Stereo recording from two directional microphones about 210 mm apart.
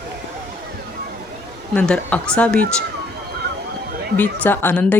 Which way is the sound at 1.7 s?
5° left (ahead or behind).